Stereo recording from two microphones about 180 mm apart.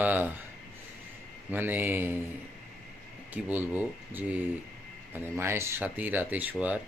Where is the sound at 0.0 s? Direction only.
10° right (ahead or behind).